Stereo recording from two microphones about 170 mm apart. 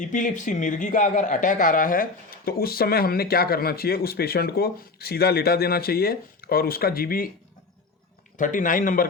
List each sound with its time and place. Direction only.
0.0 s a man's voice: 50° left (ahead or behind)
8.4 s a man's voice: 50° left (ahead or behind)